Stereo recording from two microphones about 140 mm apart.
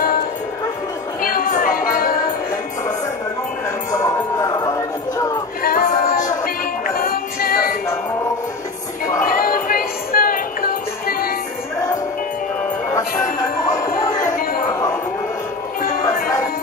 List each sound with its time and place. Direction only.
1.2 s music: 80° left
4.0 s music: 30° left (ahead or behind)
5.6 s music: 90° left
9.3 s music: 90° left
15.8 s music: 75° left (ahead or behind)